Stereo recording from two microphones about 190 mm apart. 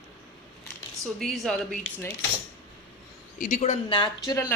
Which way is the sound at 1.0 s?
Centre (ahead or behind).